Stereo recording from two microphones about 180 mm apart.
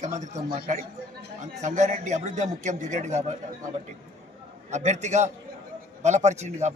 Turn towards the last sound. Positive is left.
turn(degrees=-40)  # may be behind; listen again after turning